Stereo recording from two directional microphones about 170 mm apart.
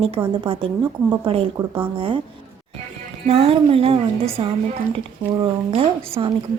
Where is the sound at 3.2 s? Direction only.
35° right (ahead or behind).